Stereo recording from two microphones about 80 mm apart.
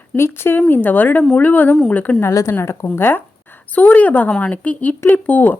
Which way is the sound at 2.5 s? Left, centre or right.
Left.